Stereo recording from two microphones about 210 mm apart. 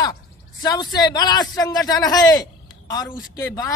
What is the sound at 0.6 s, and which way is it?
A man's voice, 20° left (ahead or behind).